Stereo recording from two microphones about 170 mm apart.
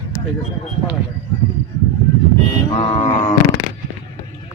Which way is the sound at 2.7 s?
35° left (ahead or behind).